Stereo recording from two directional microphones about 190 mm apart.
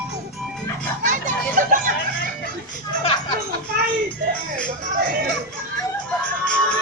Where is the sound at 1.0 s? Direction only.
40° right (ahead or behind).